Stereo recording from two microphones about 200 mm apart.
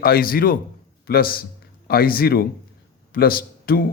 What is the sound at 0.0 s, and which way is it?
A man's voice, 45° left (ahead or behind).